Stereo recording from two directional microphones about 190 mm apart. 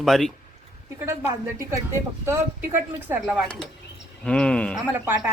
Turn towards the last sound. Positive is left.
turn(degrees=-10)  # may be behind; listen again after turning